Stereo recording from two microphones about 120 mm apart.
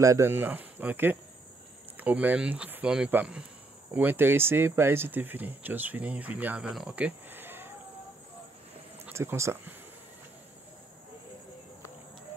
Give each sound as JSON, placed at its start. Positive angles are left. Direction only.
{"t": 0.0, "sound": "speech", "side_deg": -25}
{"t": 7.0, "sound": "a sound", "side_deg": -15}
{"t": 9.1, "sound": "speech", "side_deg": -20}